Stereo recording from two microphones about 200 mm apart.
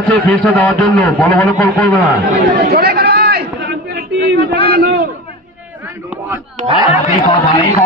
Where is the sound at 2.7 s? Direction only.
50° right (ahead or behind).